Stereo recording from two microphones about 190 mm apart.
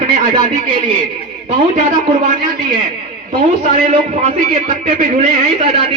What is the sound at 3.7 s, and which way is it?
Speech, 40° right (ahead or behind).